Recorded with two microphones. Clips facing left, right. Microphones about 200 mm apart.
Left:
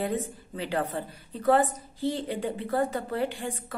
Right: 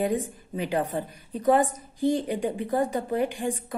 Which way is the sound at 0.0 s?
15° right (ahead or behind).